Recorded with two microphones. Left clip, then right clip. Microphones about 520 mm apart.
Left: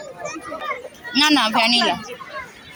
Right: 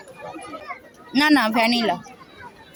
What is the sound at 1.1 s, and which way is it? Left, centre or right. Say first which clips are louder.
Speech: left 1 dB; right.